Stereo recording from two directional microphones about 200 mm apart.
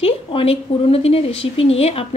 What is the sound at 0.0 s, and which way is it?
A woman's voice, 30° left (ahead or behind).